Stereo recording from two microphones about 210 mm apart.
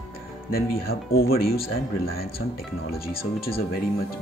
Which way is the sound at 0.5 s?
45° left (ahead or behind).